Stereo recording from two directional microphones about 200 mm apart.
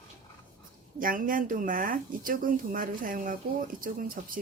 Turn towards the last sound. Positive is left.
turn(degrees=-45)  # may be behind; listen again after turning